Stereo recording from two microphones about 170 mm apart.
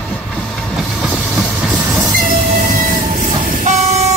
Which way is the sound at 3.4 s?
50° right (ahead or behind).